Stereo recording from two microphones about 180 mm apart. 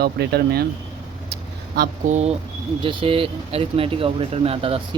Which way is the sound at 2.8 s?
30° right (ahead or behind).